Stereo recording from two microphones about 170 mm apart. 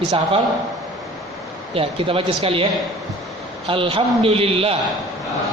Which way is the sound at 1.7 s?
35° right (ahead or behind).